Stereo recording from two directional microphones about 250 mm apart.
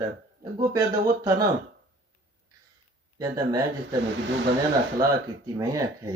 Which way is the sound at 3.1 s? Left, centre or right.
Centre.